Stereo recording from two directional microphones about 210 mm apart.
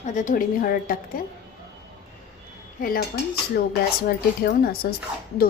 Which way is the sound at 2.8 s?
45° left (ahead or behind).